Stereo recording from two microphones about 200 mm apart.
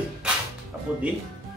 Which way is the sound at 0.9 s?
5° right (ahead or behind).